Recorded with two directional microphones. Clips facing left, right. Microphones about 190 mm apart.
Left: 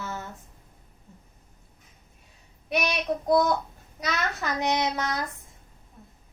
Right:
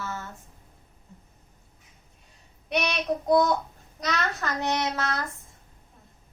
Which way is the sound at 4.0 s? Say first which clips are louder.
Right 1 dB; 10° left (ahead or behind).